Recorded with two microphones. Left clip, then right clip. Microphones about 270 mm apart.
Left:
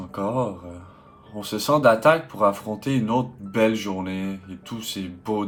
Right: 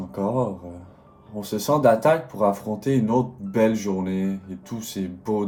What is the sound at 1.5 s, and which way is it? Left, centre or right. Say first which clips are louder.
Speech: left 1 dB; centre.